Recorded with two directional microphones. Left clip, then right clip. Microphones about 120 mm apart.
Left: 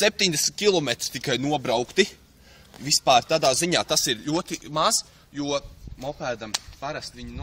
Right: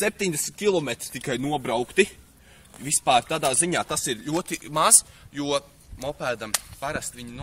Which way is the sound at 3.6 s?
65° left (ahead or behind).